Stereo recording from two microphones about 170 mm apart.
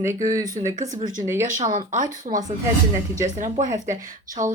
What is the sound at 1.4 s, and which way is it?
Speech, 50° right (ahead or behind).